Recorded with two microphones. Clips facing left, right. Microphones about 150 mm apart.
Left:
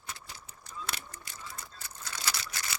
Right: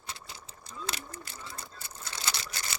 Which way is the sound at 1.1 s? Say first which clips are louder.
Right 3 dB; 30° right (ahead or behind).